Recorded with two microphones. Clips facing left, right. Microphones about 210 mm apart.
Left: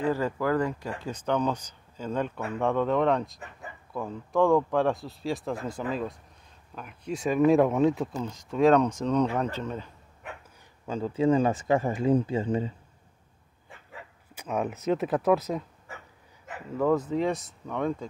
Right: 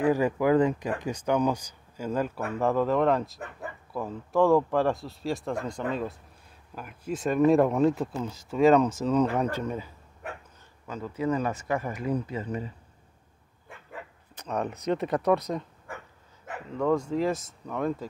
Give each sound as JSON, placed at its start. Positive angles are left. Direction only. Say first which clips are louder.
{"t": 0.0, "sound": "speech", "louder": "right 3 dB", "side_deg": -15}
{"t": 10.9, "sound": "speech", "louder": "left 5 dB", "side_deg": 30}
{"t": 14.3, "sound": "speech", "louder": "left 1 dB", "side_deg": 5}
{"t": 16.7, "sound": "speech", "louder": "left 1 dB", "side_deg": 0}